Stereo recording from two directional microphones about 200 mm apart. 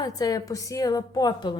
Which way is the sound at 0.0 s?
20° left (ahead or behind).